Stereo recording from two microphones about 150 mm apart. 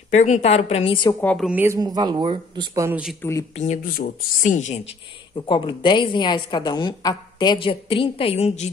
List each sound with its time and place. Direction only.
0.1 s speech: 50° left (ahead or behind)
1.4 s speech: 10° right (ahead or behind)
1.7 s speech: 25° right (ahead or behind)
3.2 s speech: 20° left (ahead or behind)
3.5 s speech: 55° left (ahead or behind)
5.3 s a woman's voice: 35° left (ahead or behind)